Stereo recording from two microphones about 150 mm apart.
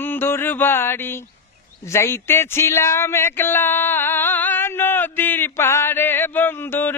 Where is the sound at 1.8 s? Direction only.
20° left (ahead or behind).